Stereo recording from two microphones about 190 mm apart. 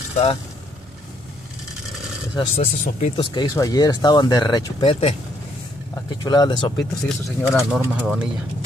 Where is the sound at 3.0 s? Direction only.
25° left (ahead or behind).